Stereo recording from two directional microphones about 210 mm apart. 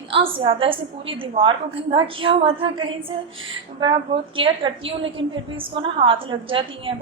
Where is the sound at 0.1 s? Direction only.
25° right (ahead or behind).